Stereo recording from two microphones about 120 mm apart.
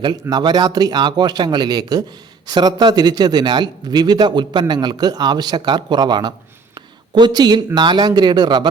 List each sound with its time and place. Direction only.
0.0 s a man's voice: 35° right (ahead or behind)
6.7 s a sound: 35° right (ahead or behind)
7.8 s a man's voice: 35° right (ahead or behind)